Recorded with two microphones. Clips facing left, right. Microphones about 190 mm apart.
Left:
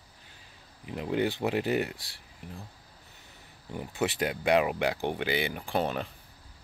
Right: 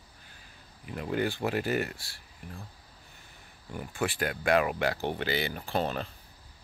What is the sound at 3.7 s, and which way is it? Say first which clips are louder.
Speech: left 2 dB; 20° left (ahead or behind).